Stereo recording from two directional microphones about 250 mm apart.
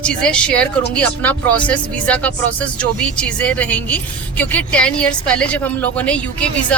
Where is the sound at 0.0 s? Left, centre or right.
Centre.